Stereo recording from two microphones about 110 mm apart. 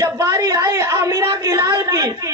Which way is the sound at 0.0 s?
30° right (ahead or behind).